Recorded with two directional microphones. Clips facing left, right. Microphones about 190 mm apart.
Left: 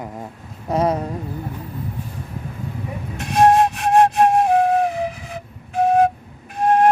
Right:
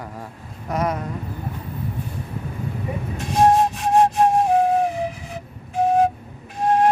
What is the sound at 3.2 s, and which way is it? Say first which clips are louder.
Flute: left 2 dB; 70° left (ahead or behind).